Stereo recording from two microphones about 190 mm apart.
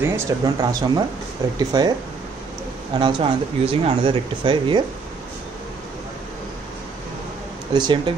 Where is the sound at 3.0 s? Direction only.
25° right (ahead or behind).